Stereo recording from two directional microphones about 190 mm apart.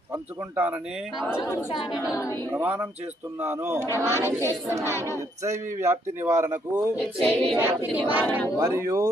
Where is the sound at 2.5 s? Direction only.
10° right (ahead or behind).